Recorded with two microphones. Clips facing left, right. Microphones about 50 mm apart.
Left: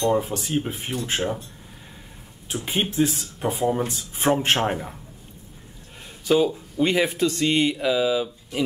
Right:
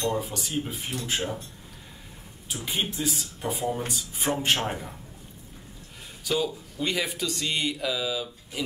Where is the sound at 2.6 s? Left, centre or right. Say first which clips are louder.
Left 7 dB; left.